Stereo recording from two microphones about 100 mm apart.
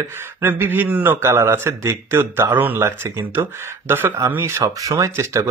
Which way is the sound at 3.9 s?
20° right (ahead or behind).